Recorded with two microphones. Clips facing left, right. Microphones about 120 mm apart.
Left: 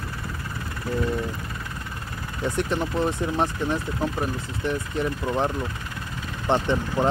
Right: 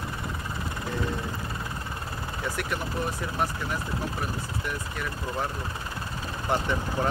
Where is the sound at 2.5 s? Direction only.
25° left (ahead or behind).